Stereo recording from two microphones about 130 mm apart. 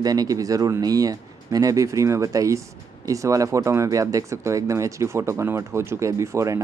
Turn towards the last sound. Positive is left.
turn(degrees=-25)  # may be behind; listen again after turning